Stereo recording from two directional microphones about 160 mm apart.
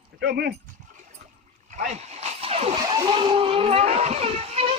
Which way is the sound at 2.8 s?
30° right (ahead or behind).